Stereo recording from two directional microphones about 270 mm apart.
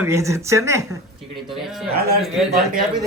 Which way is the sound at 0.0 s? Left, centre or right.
Centre.